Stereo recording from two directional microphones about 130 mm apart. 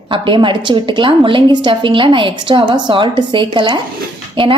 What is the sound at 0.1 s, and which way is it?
A woman's voice, 40° right (ahead or behind).